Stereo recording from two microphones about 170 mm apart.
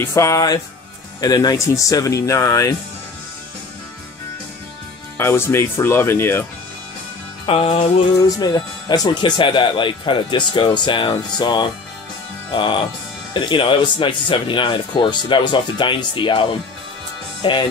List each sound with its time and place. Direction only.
0.0 s speech: 15° left (ahead or behind)
5.1 s speech: 15° left (ahead or behind)
7.4 s speech: 35° left (ahead or behind)